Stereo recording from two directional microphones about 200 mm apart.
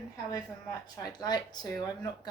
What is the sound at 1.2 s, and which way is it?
Speech, 20° left (ahead or behind).